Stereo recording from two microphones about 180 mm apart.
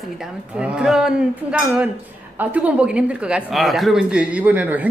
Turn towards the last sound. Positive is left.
turn(degrees=-10)  # may be behind; listen again after turning